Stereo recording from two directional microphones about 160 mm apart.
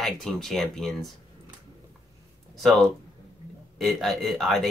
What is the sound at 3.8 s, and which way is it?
Speech, centre (ahead or behind).